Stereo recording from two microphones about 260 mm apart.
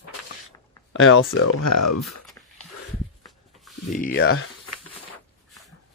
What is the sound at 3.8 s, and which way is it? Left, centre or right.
Speech, left.